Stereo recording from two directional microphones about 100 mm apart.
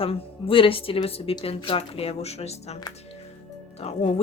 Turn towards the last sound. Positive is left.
turn(degrees=80)